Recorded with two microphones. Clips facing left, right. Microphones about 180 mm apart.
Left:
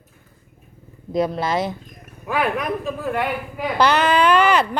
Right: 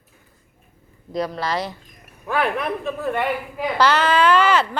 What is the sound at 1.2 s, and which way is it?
Speech, 20° left (ahead or behind).